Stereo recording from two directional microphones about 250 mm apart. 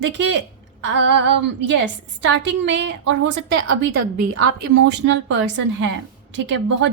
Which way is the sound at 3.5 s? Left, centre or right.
Right.